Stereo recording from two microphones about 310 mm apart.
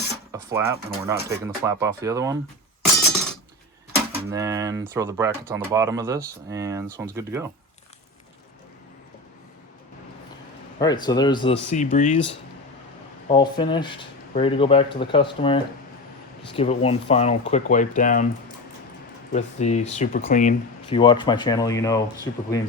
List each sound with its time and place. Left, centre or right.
0.3 s speech: centre
4.3 s speech: centre
10.8 s speech: centre
13.2 s speech: centre
19.3 s speech: left